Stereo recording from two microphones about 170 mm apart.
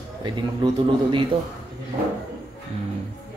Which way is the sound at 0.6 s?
25° right (ahead or behind).